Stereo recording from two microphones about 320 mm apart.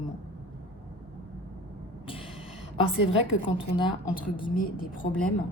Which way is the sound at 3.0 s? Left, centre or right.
Left.